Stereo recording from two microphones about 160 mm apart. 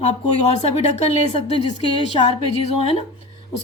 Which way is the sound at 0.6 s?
45° left (ahead or behind).